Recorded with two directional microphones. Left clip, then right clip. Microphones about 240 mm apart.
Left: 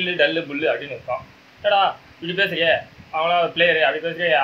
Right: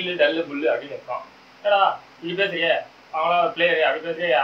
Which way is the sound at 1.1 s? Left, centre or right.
Left.